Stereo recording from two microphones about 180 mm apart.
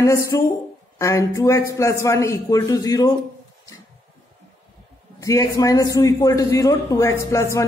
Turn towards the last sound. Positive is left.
turn(degrees=15)  # may be behind; listen again after turning